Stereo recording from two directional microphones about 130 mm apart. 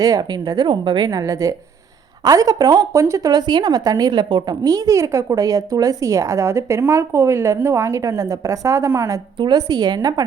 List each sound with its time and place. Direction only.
0.0 s speech: 30° right (ahead or behind)